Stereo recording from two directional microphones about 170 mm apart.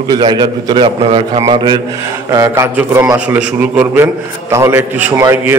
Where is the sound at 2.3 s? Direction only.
15° right (ahead or behind).